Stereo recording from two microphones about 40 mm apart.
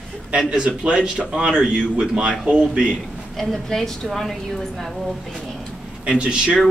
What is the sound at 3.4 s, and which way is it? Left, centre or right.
A woman's voice, centre.